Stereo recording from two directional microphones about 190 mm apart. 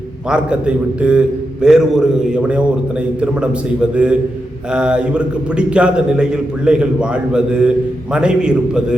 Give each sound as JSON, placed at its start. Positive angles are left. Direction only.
{"t": 0.3, "sound": "a man's voice", "side_deg": -5}